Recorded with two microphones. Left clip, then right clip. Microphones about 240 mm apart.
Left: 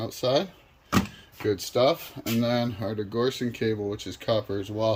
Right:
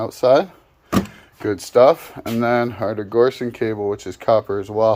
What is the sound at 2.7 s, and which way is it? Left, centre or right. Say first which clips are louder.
Speech: right 10 dB; centre.